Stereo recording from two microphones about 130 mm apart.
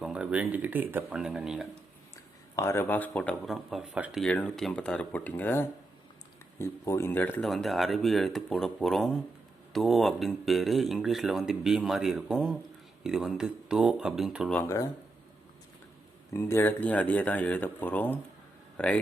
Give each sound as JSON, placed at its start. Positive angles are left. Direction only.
{"t": 0.0, "sound": "speech", "side_deg": -10}
{"t": 2.6, "sound": "speech", "side_deg": 20}
{"t": 7.4, "sound": "speech", "side_deg": 0}
{"t": 14.5, "sound": "speech", "side_deg": 20}
{"t": 16.3, "sound": "speech", "side_deg": 20}